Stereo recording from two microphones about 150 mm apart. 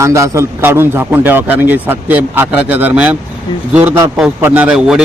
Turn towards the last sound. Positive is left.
turn(degrees=-5)  # may be behind; listen again after turning